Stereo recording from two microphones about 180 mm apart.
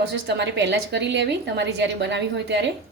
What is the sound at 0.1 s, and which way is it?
A woman's voice, 75° right (ahead or behind).